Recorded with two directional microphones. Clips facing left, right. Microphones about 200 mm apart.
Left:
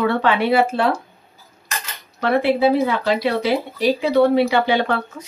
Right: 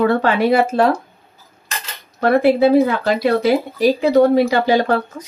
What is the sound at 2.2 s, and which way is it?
Speech, 45° right (ahead or behind).